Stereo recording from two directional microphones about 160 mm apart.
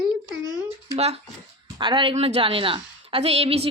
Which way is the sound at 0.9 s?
40° right (ahead or behind).